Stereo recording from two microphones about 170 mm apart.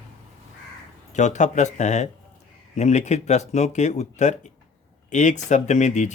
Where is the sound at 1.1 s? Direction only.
45° left (ahead or behind).